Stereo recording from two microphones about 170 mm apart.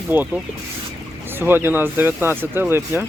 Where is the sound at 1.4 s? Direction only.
10° right (ahead or behind).